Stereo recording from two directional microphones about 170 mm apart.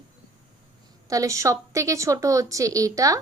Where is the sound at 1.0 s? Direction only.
20° right (ahead or behind).